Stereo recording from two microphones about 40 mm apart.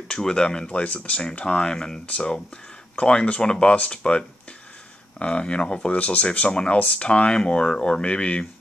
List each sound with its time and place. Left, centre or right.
0.1 s speech: centre
0.7 s speech: left
1.4 s speech: left
2.0 s speech: left